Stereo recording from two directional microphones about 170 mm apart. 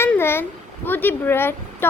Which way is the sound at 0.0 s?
15° left (ahead or behind).